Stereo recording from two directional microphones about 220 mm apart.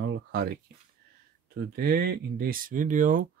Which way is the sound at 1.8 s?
45° right (ahead or behind).